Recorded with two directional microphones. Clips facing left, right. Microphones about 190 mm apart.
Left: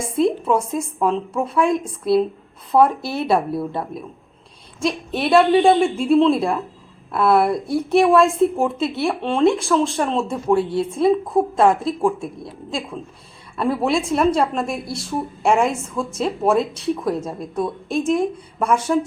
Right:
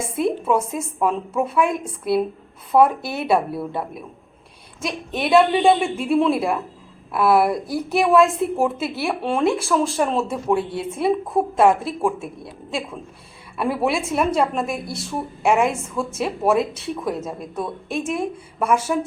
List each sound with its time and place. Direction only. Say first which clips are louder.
0.2 s a woman's voice: left 2 dB; 5° right (ahead or behind)
3.0 s speech: left 3 dB; 30° left (ahead or behind)
3.2 s a woman's voice: even; centre (ahead or behind)
13.6 s a woman's voice: left 2 dB; 5° right (ahead or behind)